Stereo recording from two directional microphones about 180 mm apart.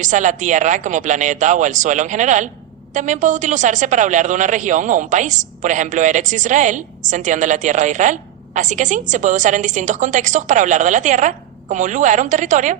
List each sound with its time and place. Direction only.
0.0 s a woman's voice: 45° right (ahead or behind)